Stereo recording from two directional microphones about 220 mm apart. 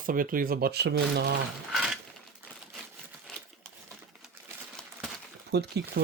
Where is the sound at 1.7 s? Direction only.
Centre (ahead or behind).